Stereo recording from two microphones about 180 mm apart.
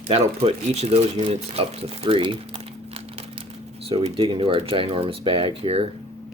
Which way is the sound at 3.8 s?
30° right (ahead or behind).